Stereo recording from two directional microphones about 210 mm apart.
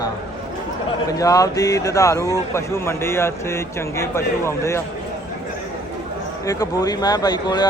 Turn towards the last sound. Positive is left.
turn(degrees=20)  # may be behind; listen again after turning